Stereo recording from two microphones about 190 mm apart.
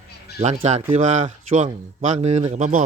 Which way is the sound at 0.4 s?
35° right (ahead or behind).